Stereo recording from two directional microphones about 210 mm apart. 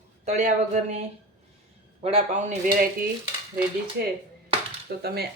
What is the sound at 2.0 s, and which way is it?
Speech, 30° right (ahead or behind).